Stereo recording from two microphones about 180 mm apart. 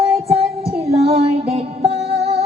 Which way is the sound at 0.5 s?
35° right (ahead or behind).